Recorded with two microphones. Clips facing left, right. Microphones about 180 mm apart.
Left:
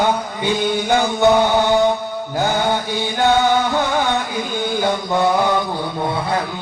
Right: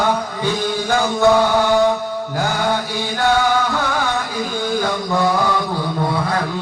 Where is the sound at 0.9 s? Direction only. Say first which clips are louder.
Even; 20° left (ahead or behind).